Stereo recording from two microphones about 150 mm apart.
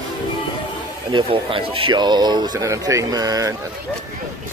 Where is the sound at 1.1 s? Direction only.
35° right (ahead or behind).